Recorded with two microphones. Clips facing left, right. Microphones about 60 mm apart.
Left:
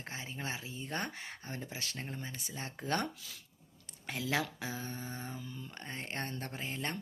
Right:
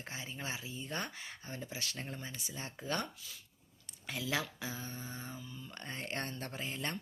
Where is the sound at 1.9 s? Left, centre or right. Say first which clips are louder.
Left 1 dB; left.